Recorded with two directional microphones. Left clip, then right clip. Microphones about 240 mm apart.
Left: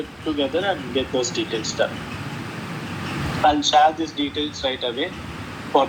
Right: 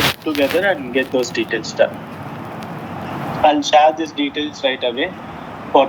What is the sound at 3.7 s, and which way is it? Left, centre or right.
Speech, centre.